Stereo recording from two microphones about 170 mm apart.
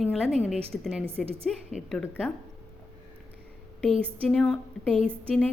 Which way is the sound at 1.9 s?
5° left (ahead or behind).